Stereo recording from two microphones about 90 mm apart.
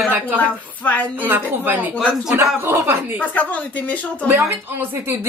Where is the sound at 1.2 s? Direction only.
20° right (ahead or behind).